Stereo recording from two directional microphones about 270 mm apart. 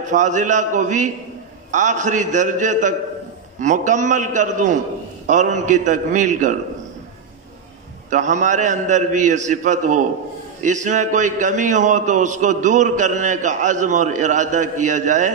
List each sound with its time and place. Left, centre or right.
0.0 s a man's voice: right
8.1 s a man's voice: right